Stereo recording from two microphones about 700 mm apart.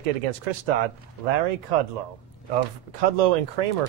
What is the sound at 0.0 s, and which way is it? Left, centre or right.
Speech, right.